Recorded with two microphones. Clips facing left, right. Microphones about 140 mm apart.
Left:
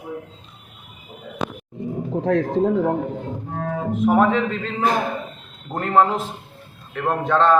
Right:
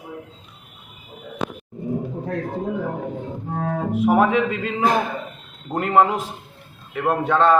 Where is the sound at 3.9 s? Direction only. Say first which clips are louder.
Even; 10° right (ahead or behind).